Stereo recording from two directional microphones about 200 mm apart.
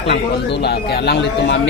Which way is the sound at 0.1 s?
60° left (ahead or behind).